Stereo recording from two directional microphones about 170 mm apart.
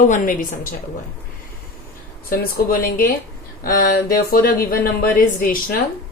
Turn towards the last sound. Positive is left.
turn(degrees=55)  # may be behind; listen again after turning